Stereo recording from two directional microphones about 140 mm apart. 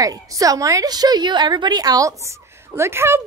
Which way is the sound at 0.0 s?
25° right (ahead or behind).